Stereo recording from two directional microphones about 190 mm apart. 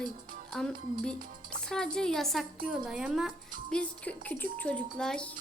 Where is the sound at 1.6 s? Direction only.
5° left (ahead or behind).